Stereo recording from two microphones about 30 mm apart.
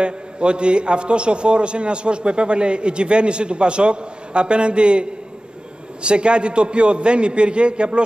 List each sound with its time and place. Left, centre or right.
0.0 s a man's voice: right
6.0 s a man's voice: right